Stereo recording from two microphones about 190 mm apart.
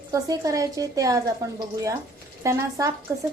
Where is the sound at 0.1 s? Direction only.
15° right (ahead or behind).